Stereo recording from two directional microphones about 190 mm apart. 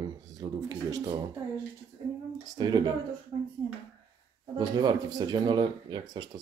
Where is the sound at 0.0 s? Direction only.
20° right (ahead or behind).